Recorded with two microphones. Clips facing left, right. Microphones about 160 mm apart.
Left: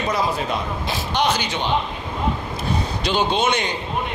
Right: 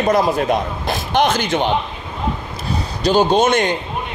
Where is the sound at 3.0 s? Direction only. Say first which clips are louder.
Right 7 dB; 40° right (ahead or behind).